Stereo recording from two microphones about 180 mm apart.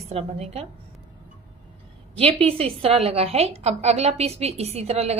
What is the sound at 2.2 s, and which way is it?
A woman's voice, 30° right (ahead or behind).